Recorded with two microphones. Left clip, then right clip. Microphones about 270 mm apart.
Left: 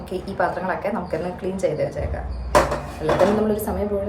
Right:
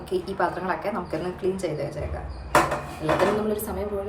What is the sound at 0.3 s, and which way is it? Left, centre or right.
Speech, centre.